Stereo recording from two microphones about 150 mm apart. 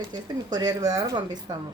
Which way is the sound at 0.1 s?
25° right (ahead or behind).